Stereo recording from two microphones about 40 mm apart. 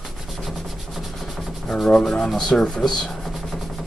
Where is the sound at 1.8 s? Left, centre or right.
Centre.